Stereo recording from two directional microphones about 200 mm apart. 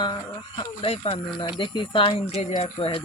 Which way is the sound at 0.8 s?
30° left (ahead or behind).